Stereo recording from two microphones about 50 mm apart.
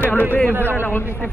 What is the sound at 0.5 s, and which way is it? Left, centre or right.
Speech, right.